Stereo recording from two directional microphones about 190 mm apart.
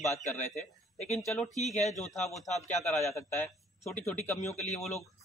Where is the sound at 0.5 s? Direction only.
35° left (ahead or behind).